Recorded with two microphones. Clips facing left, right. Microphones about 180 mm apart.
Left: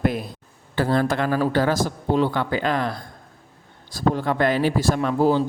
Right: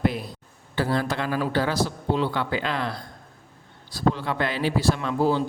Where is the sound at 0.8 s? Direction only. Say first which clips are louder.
Left 4 dB; 50° left (ahead or behind).